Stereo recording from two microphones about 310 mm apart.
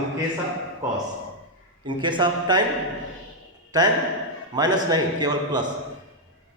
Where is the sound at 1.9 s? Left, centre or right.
Centre.